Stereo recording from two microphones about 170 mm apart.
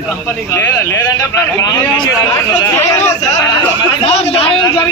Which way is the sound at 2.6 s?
15° left (ahead or behind).